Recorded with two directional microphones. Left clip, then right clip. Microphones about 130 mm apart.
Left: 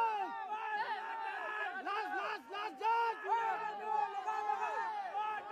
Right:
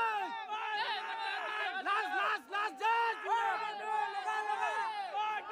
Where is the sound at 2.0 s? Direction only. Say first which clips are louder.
Right 5 dB; 35° right (ahead or behind).